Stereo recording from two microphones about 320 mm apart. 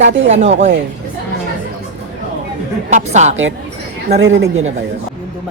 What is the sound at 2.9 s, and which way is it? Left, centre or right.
Speech, right.